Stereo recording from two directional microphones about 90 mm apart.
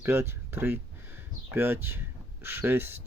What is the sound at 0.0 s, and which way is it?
Speech, 25° right (ahead or behind).